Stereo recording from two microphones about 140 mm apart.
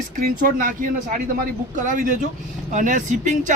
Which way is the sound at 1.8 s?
65° right (ahead or behind).